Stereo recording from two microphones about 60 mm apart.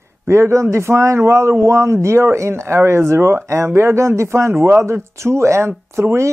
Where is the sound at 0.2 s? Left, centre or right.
Right.